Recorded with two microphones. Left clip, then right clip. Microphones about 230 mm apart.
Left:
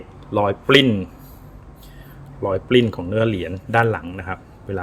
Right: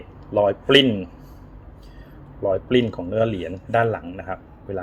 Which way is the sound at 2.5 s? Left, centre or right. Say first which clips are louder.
Left 3 dB; left.